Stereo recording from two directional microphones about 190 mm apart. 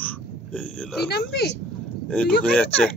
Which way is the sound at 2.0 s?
5° left (ahead or behind).